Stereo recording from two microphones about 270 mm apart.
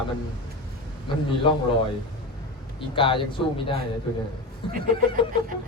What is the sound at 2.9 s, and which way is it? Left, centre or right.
Speech, centre.